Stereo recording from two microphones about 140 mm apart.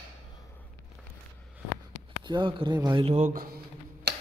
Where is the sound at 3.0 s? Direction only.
50° right (ahead or behind).